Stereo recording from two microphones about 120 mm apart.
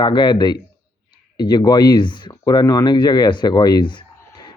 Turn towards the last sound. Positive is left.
turn(degrees=40)  # may be behind; listen again after turning